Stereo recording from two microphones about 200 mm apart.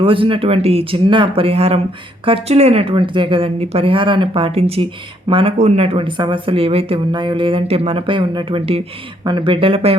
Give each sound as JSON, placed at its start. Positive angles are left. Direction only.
{"t": 0.0, "sound": "speech", "side_deg": -25}